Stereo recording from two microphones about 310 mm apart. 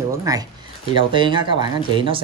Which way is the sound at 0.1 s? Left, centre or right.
Centre.